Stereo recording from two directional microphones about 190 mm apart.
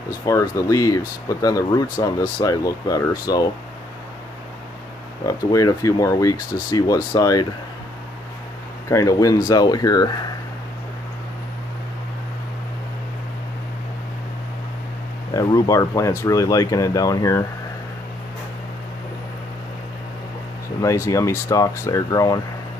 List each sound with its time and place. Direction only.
0.2 s speech: 15° left (ahead or behind)
5.2 s speech: 20° left (ahead or behind)
8.8 s speech: 15° left (ahead or behind)
15.3 s speech: 20° left (ahead or behind)
20.8 s speech: 15° left (ahead or behind)